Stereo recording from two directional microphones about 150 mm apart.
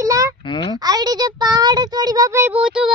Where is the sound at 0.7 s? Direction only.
25° right (ahead or behind).